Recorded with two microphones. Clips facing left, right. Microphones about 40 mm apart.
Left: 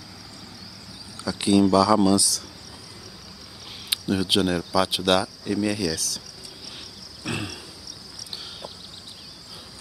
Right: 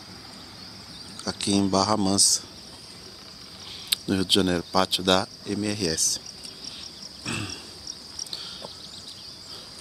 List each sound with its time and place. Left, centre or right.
1.1 s speech: centre
3.9 s speech: centre
7.2 s a sound: centre